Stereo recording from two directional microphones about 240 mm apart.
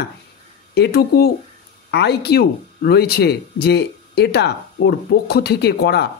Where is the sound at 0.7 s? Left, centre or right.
Left.